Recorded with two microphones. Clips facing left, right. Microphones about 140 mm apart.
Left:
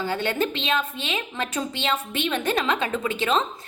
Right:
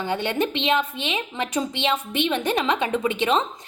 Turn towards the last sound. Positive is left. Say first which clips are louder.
# right 2 dB
turn(degrees=-20)  # may be behind; listen again after turning